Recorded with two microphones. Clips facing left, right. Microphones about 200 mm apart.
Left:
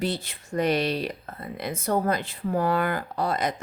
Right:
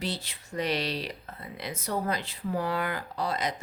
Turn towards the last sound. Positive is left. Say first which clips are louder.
# left 4 dB
turn(degrees=50)  # may be behind; listen again after turning